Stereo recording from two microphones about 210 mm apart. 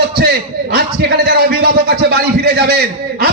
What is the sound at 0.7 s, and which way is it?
A man's voice, 50° right (ahead or behind).